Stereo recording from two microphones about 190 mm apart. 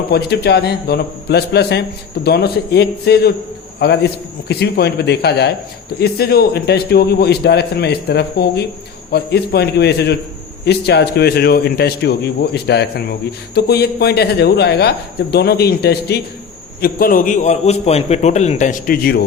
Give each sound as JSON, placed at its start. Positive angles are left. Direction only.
{"t": 0.1, "sound": "a man's voice", "side_deg": 60}